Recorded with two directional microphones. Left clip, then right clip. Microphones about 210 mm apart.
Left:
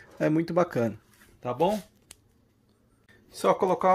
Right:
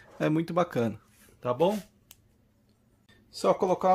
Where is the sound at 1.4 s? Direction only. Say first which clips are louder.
Even; 20° right (ahead or behind).